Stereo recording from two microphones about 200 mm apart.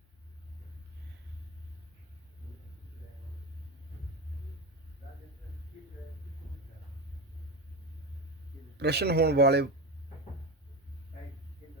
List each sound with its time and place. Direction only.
8.8 s speech: 55° right (ahead or behind)